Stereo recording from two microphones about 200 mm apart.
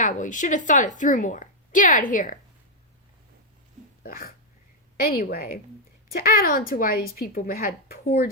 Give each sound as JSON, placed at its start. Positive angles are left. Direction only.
{"t": 0.0, "sound": "a woman's voice", "side_deg": 40}
{"t": 4.0, "sound": "a woman's voice", "side_deg": 45}